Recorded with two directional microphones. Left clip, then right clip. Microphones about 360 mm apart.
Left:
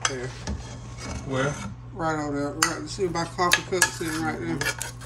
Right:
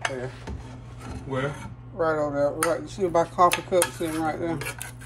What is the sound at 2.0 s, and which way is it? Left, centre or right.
Dishes, centre.